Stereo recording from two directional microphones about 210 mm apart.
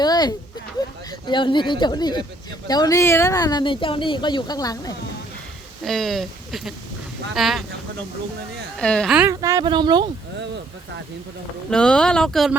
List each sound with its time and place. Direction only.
0.0 s a sound: 20° left (ahead or behind)
1.3 s speech: 20° left (ahead or behind)
5.8 s speech: centre (ahead or behind)
8.8 s speech: 5° left (ahead or behind)
9.3 s speech: 15° right (ahead or behind)
11.7 s speech: 5° left (ahead or behind)